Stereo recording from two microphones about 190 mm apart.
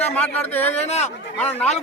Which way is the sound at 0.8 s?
35° left (ahead or behind).